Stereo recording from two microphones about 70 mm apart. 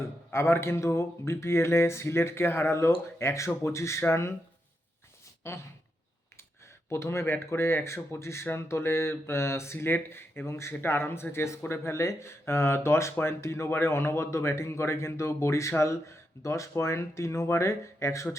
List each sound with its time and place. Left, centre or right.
0.3 s speech: left
5.4 s a sound: left
6.9 s speech: left